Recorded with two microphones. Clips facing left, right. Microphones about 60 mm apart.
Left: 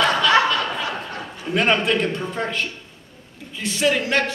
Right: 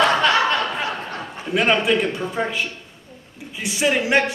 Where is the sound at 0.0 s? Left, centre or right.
Right.